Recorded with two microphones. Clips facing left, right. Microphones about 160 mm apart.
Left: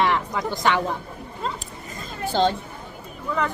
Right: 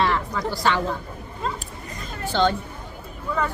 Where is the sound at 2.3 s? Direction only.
35° left (ahead or behind).